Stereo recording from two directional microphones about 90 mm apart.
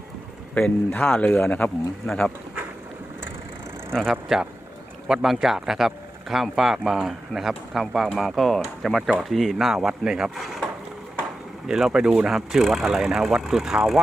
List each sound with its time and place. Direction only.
0.9 s speech: 15° left (ahead or behind)
3.9 s speech: centre (ahead or behind)
11.7 s speech: 5° right (ahead or behind)